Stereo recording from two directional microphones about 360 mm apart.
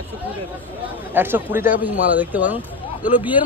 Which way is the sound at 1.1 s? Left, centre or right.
Centre.